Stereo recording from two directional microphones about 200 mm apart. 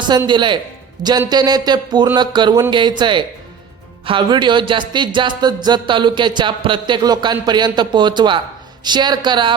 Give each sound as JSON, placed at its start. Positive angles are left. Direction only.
{"t": 0.1, "sound": "speech", "side_deg": -20}